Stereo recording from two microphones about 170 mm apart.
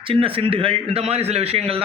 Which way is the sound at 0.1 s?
30° right (ahead or behind).